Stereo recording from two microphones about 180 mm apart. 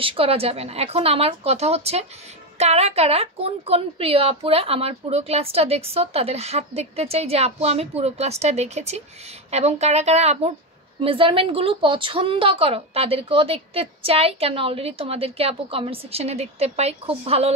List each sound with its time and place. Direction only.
0.0 s a woman's voice: 30° right (ahead or behind)